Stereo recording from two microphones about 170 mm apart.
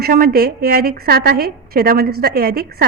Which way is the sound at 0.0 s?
60° right (ahead or behind).